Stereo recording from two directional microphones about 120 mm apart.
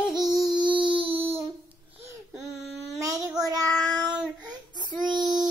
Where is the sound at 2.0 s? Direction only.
20° right (ahead or behind).